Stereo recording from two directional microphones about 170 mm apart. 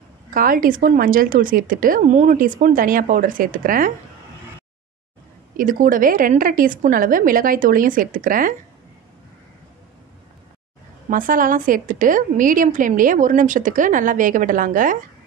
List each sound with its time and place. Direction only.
0.3 s speech: 55° right (ahead or behind)
5.6 s a woman's voice: 55° right (ahead or behind)
11.1 s a woman's voice: 55° right (ahead or behind)